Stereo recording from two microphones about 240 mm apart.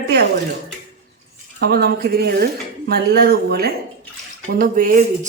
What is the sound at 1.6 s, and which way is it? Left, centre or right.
Speech, right.